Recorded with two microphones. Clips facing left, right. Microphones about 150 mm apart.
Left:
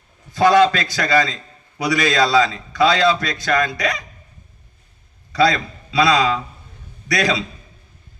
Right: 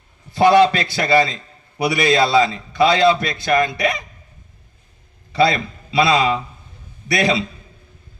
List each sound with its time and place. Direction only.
0.3 s a man's voice: 25° right (ahead or behind)
5.3 s a man's voice: 25° right (ahead or behind)